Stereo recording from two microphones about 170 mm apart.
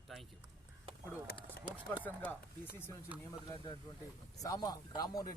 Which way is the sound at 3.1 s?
10° right (ahead or behind).